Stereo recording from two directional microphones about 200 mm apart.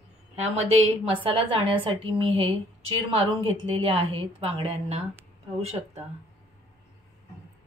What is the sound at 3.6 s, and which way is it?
A woman's voice, 25° right (ahead or behind).